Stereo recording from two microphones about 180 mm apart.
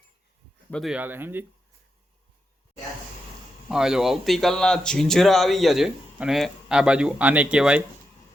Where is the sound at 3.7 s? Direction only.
5° right (ahead or behind).